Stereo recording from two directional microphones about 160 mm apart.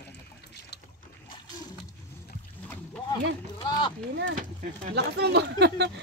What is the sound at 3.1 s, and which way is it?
Speech, 25° left (ahead or behind).